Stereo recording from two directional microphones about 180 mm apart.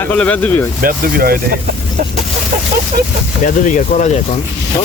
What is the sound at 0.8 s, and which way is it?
Speech, 55° right (ahead or behind).